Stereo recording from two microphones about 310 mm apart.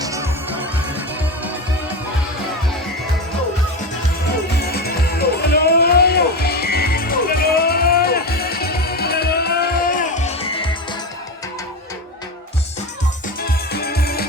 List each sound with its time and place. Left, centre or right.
0.0 s music: centre
4.7 s music: left
13.7 s music: left